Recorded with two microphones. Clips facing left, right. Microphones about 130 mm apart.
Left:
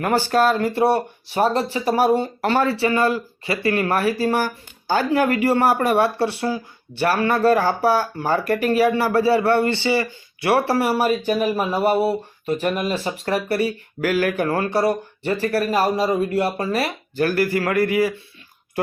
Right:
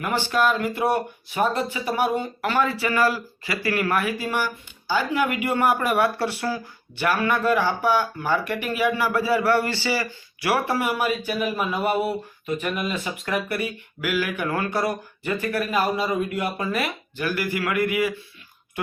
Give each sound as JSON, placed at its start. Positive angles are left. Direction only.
{"t": 0.0, "sound": "speech", "side_deg": 40}